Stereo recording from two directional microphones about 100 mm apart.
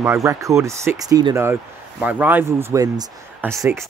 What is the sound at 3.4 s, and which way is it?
Speech, 15° right (ahead or behind).